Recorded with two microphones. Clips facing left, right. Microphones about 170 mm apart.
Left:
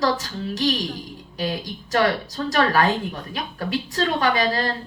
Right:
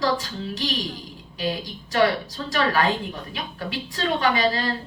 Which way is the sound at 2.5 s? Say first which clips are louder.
Left 2 dB; 45° left (ahead or behind).